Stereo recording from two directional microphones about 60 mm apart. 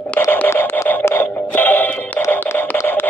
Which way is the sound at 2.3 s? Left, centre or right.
Left.